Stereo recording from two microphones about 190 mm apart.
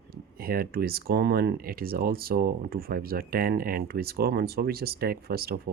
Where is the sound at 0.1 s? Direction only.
50° right (ahead or behind).